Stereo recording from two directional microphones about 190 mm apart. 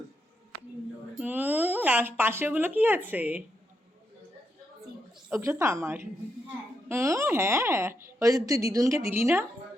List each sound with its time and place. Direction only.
1.2 s speech: 10° right (ahead or behind)
5.3 s a woman's voice: 15° right (ahead or behind)